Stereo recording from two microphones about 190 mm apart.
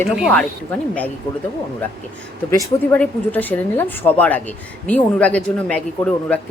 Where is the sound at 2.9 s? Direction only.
10° left (ahead or behind).